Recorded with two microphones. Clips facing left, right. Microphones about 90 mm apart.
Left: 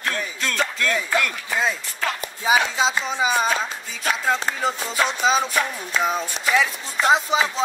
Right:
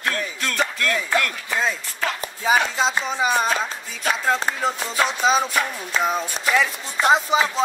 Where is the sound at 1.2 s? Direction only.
5° left (ahead or behind).